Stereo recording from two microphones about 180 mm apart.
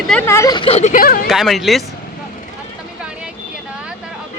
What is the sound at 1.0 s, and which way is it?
Speech, 55° left (ahead or behind).